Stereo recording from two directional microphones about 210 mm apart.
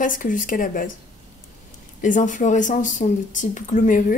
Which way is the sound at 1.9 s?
35° left (ahead or behind).